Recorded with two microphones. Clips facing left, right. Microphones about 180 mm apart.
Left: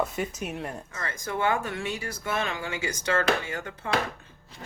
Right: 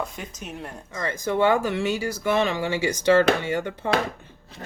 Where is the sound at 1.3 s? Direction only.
75° right (ahead or behind).